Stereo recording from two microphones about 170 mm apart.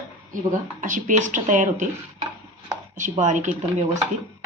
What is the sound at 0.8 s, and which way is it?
Speech, 50° right (ahead or behind).